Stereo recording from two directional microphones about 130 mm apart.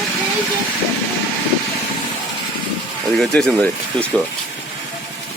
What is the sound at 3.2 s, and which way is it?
Speech, 5° left (ahead or behind).